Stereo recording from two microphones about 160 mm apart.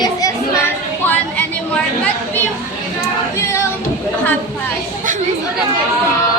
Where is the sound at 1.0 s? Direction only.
10° left (ahead or behind).